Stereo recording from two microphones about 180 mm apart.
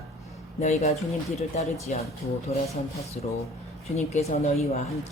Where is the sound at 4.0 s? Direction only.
35° left (ahead or behind).